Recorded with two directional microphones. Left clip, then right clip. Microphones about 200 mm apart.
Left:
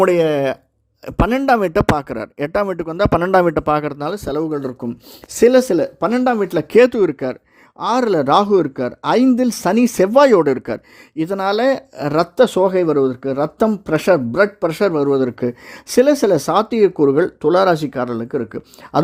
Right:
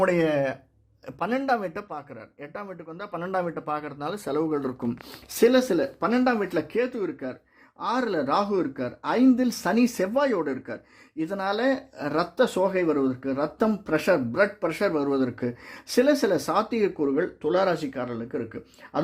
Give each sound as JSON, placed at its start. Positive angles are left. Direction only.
{"t": 0.0, "sound": "speech", "side_deg": 45}
{"t": 5.3, "sound": "speech", "side_deg": 35}